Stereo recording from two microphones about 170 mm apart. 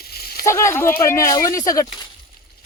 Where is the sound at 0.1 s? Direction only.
65° left (ahead or behind).